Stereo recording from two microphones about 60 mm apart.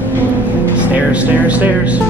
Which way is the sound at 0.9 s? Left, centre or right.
Right.